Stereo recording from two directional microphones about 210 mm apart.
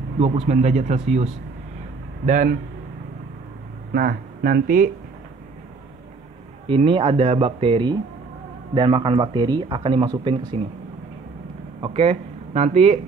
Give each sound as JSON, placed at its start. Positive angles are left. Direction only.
{"t": 0.2, "sound": "speech", "side_deg": -30}
{"t": 3.9, "sound": "speech", "side_deg": -45}
{"t": 6.7, "sound": "speech", "side_deg": -25}
{"t": 11.8, "sound": "speech", "side_deg": -30}